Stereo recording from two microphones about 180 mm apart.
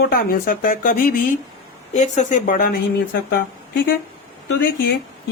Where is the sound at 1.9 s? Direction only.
40° left (ahead or behind).